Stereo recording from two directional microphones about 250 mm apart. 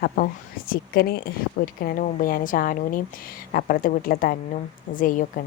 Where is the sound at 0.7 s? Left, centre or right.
Left.